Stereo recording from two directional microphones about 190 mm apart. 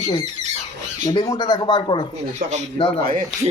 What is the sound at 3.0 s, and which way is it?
Speech, 45° right (ahead or behind).